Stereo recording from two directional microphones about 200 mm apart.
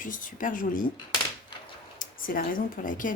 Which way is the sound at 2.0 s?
45° left (ahead or behind).